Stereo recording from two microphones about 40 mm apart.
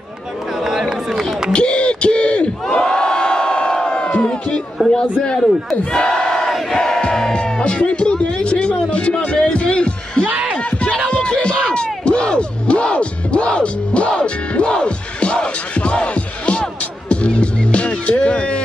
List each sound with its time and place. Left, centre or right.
0.7 s run: centre
1.5 s crowd: left
4.8 s a man's voice: right
5.9 s battle cry: centre
6.7 s crowd: centre
7.0 s music: centre
10.6 s a sound: left
11.1 s music: left
11.7 s crowd: left
17.1 s music: left